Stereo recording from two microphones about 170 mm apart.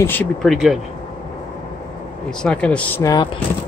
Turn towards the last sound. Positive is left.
turn(degrees=20)  # may be behind; listen again after turning